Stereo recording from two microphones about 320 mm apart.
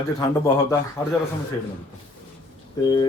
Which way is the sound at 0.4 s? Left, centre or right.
Centre.